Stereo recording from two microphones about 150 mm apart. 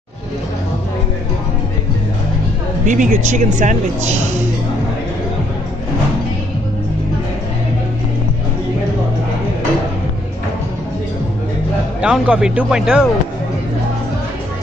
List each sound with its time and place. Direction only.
2.9 s speech: 55° right (ahead or behind)
12.0 s speech: 5° right (ahead or behind)